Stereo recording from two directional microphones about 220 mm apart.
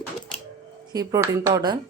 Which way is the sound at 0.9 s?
15° right (ahead or behind).